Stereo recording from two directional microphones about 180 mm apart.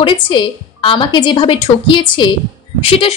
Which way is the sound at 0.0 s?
25° left (ahead or behind).